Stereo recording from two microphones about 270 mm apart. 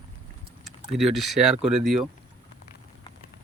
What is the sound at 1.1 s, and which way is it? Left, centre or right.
Speech, centre.